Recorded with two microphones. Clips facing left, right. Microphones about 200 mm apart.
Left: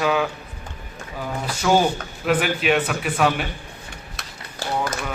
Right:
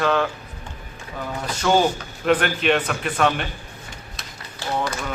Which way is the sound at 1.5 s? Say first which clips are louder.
Even; 10° left (ahead or behind).